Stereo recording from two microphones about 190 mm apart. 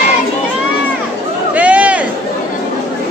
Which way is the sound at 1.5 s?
5° right (ahead or behind).